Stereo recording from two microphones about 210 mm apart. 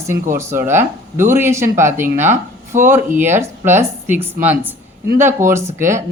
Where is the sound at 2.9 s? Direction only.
10° right (ahead or behind).